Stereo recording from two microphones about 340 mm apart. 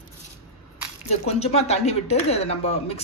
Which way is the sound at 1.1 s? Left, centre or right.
Centre.